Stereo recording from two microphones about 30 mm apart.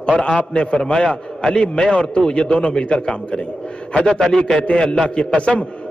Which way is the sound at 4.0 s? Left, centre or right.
Centre.